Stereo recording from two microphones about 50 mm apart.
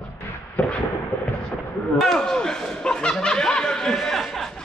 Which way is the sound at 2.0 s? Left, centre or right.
Centre.